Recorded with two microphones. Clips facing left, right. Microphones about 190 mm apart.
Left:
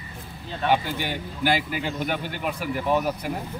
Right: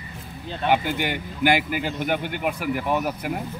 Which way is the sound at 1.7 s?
55° right (ahead or behind).